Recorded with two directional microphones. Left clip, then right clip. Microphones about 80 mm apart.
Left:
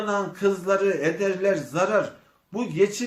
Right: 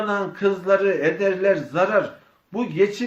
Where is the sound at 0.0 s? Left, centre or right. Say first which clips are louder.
Right 2 dB; right.